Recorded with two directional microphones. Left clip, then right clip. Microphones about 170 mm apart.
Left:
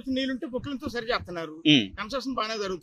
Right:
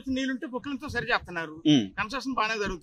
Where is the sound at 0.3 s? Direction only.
15° right (ahead or behind).